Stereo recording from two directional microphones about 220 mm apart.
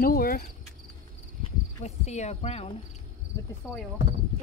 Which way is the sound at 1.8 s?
30° left (ahead or behind).